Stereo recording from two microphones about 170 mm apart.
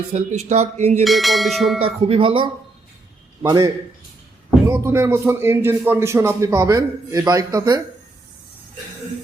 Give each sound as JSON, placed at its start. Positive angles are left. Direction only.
{"t": 0.1, "sound": "speech", "side_deg": -40}
{"t": 1.0, "sound": "ding", "side_deg": 0}
{"t": 1.8, "sound": "speech", "side_deg": -30}
{"t": 3.4, "sound": "a man's voice", "side_deg": -20}
{"t": 4.8, "sound": "a man's voice", "side_deg": -15}